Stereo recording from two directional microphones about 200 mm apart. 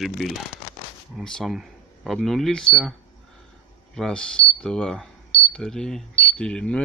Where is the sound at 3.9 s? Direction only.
5° left (ahead or behind).